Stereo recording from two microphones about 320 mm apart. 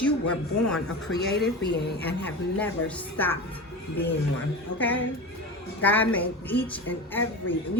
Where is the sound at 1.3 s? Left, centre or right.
Left.